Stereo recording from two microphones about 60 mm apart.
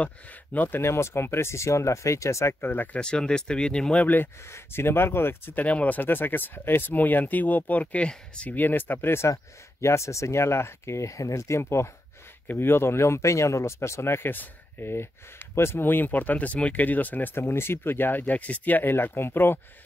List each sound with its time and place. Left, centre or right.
0.0 s speech: left
0.8 s speech: left
2.6 s speech: left
3.0 s speech: centre
4.0 s speech: left
4.5 s speech: left; by 8.5 s centre
8.5 s speech: left
9.3 s speech: left
12.4 s speech: left
17.4 s speech: left